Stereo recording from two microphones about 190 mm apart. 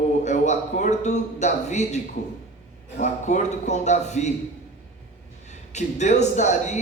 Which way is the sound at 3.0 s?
40° left (ahead or behind).